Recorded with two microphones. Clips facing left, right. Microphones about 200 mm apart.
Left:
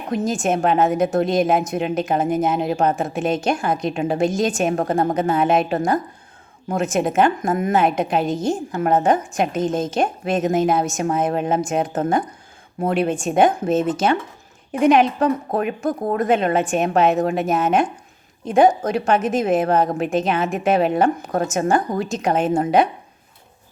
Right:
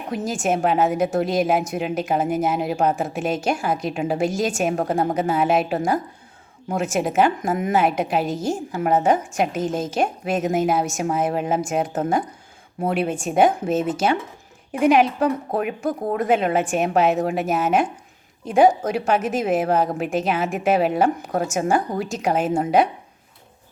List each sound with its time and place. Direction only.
0.1 s a woman's voice: 10° right (ahead or behind)